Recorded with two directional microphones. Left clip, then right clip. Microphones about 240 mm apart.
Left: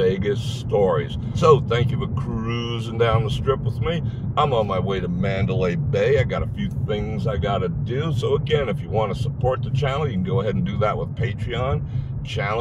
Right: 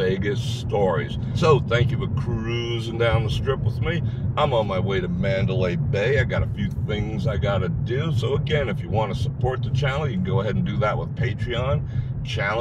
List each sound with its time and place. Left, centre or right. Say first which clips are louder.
0.0 s speech: left 3 dB; centre